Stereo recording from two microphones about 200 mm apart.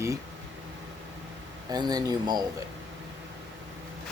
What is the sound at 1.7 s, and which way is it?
Speech, 20° right (ahead or behind).